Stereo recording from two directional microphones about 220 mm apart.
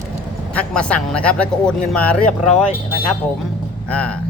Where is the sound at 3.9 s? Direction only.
5° left (ahead or behind).